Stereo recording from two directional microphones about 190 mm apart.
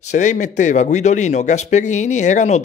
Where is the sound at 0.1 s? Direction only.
40° left (ahead or behind).